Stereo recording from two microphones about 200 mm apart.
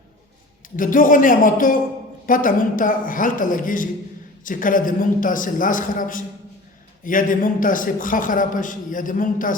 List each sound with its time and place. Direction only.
0.8 s a man's voice: 40° left (ahead or behind)